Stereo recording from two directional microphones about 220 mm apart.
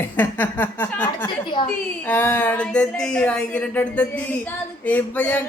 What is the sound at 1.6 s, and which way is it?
Speech, 20° left (ahead or behind).